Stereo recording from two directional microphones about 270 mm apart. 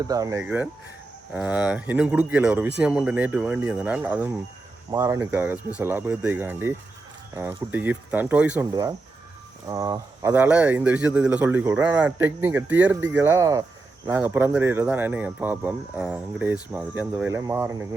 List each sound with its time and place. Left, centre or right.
0.0 s speech: centre